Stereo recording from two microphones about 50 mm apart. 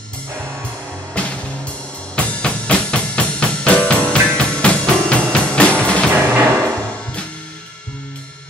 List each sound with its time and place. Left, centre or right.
1.2 s music: left
2.1 s drum: left
6.1 s music: right